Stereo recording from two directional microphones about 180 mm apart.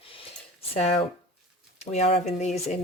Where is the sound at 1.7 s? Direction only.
40° left (ahead or behind).